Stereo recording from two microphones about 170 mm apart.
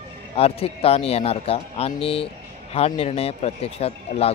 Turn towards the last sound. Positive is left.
turn(degrees=35)  # may be behind; listen again after turning